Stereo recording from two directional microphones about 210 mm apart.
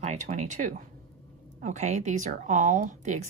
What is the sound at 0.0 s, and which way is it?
A woman's voice, 35° right (ahead or behind).